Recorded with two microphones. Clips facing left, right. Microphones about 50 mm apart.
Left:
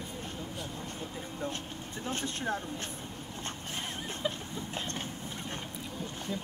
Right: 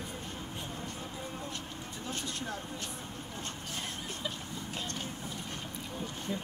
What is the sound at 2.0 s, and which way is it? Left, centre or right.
Speech, left.